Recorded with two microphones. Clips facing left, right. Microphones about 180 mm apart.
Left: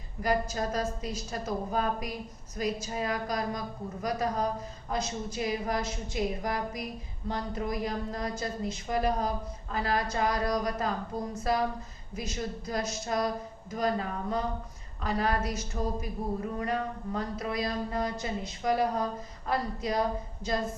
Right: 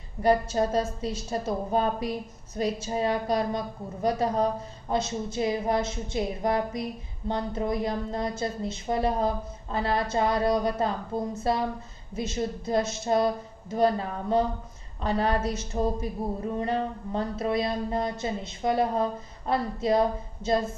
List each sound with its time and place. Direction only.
0.2 s speech: 30° right (ahead or behind)